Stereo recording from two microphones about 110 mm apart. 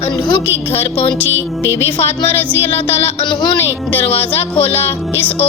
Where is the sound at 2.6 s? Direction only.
65° left (ahead or behind).